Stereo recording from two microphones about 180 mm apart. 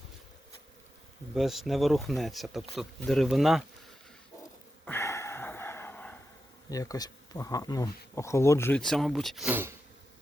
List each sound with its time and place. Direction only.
1.4 s speech: centre (ahead or behind)
4.9 s a sound: 15° left (ahead or behind)
6.7 s speech: 20° left (ahead or behind)
8.8 s speech: centre (ahead or behind)